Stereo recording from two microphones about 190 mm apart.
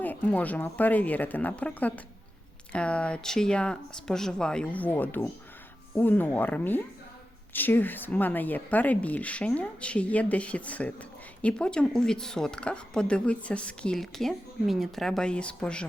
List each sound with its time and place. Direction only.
0.0 s speech: 10° left (ahead or behind)